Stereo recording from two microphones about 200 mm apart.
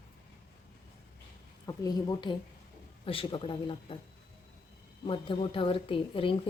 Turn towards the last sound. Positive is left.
turn(degrees=25)  # may be behind; listen again after turning